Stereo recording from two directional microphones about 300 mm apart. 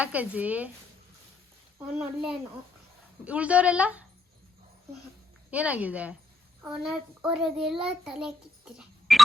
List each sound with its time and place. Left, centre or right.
0.0 s speech: centre
2.0 s speech: centre
5.5 s a child's voice: centre